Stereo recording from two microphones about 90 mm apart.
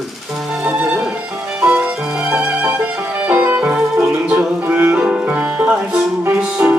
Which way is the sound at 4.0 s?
30° right (ahead or behind).